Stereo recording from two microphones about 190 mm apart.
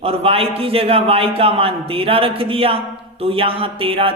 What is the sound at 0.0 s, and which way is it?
Speech, 30° right (ahead or behind).